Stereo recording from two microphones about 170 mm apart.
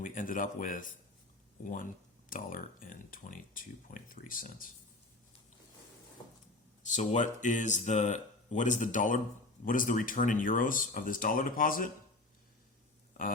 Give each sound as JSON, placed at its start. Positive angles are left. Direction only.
{"t": 0.0, "sound": "speech", "side_deg": 50}
{"t": 6.8, "sound": "speech", "side_deg": 45}